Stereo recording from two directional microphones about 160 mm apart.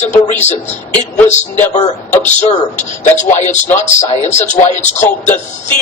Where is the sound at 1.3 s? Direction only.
45° left (ahead or behind).